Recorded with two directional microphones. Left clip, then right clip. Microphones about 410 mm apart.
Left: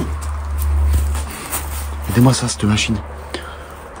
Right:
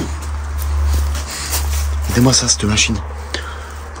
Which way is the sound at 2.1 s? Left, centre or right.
Centre.